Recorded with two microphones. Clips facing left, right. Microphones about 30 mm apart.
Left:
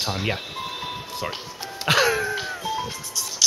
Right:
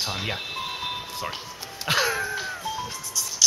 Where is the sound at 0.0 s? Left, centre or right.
Centre.